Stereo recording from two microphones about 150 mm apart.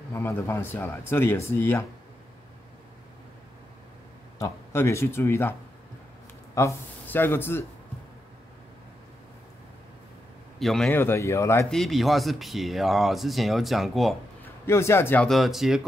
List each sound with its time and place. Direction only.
0.1 s speech: 15° left (ahead or behind)
4.4 s speech: 15° left (ahead or behind)
10.6 s a man's voice: centre (ahead or behind)
10.9 s speech: 15° left (ahead or behind)
11.7 s speech: centre (ahead or behind)
14.7 s speech: 20° left (ahead or behind)
15.2 s speech: centre (ahead or behind)